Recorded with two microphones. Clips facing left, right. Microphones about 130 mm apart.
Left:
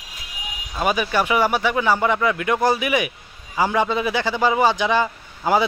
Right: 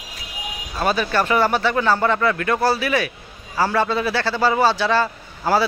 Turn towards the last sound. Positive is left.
turn(degrees=15)  # may be behind; listen again after turning